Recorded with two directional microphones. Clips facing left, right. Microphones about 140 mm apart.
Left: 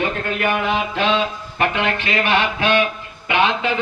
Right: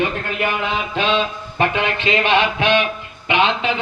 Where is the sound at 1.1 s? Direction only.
20° right (ahead or behind).